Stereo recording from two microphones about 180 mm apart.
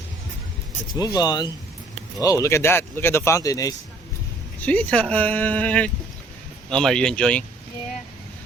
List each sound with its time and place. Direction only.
0.9 s speech: 20° left (ahead or behind)
4.6 s speech: 10° left (ahead or behind)